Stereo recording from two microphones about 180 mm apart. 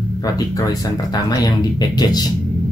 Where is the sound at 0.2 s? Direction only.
20° left (ahead or behind).